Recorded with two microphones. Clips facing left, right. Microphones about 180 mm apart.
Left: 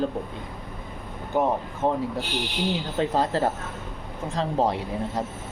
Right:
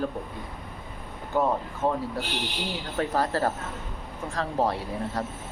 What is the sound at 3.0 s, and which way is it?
Speech, 20° left (ahead or behind).